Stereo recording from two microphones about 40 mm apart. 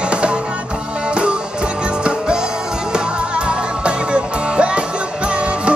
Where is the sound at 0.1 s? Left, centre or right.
Right.